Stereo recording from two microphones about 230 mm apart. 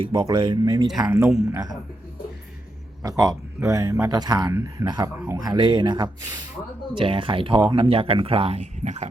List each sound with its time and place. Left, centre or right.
0.0 s speech: centre
3.0 s speech: centre